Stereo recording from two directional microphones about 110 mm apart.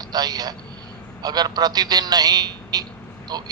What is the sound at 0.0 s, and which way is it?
A man's voice, 35° right (ahead or behind).